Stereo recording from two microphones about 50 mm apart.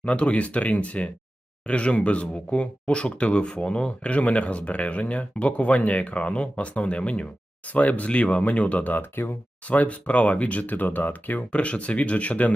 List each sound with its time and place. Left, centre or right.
0.0 s speech: left
9.6 s speech: left